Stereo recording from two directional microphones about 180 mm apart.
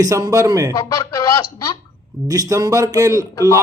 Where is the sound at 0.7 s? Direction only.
15° left (ahead or behind).